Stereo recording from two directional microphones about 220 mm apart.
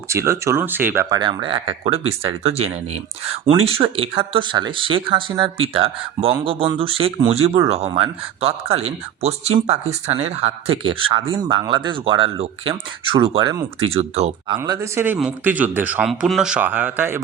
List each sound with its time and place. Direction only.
0.1 s speech: 15° right (ahead or behind)
1.2 s speech: 20° right (ahead or behind)